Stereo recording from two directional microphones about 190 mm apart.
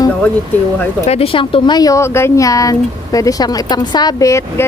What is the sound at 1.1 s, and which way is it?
Speech, 30° left (ahead or behind).